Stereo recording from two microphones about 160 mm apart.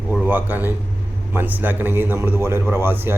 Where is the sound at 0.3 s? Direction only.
10° right (ahead or behind).